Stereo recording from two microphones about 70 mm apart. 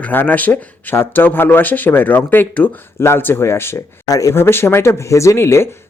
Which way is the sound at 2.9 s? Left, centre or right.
Left.